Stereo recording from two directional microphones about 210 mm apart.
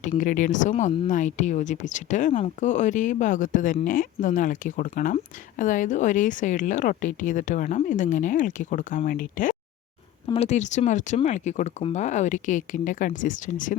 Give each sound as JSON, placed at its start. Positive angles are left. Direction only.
{"t": 0.0, "sound": "speech", "side_deg": 35}
{"t": 10.2, "sound": "speech", "side_deg": 30}